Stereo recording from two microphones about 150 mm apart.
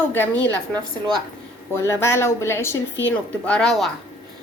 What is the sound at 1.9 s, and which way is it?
A woman's voice, 15° left (ahead or behind).